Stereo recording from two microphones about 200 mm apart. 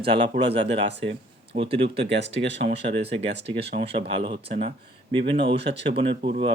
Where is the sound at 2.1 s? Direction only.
60° right (ahead or behind).